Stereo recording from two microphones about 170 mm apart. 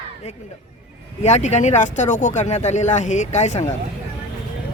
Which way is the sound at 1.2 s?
45° left (ahead or behind).